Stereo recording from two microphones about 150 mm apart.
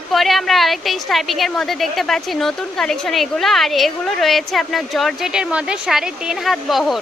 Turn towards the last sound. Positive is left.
turn(degrees=0)  # may be behind; listen again after turning